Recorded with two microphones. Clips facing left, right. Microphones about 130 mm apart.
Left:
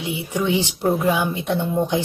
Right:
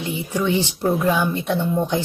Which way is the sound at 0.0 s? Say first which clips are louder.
Even; 15° left (ahead or behind).